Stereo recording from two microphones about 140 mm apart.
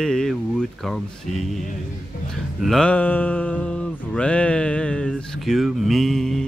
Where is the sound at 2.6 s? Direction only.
5° left (ahead or behind).